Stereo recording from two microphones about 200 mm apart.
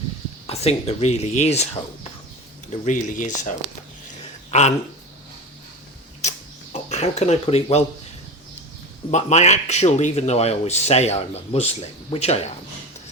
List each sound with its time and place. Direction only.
0.4 s speech: 30° left (ahead or behind)
2.8 s speech: 40° left (ahead or behind)
4.5 s speech: 35° left (ahead or behind)
6.7 s speech: 35° left (ahead or behind)
9.0 s speech: 35° left (ahead or behind)